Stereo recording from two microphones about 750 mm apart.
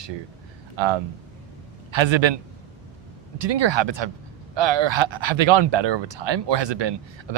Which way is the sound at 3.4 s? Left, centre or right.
Right.